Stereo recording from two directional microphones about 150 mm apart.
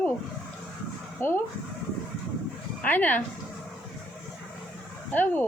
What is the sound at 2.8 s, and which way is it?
Speech, 10° left (ahead or behind).